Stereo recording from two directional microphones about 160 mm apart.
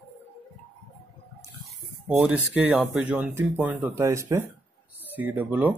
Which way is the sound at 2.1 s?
10° right (ahead or behind).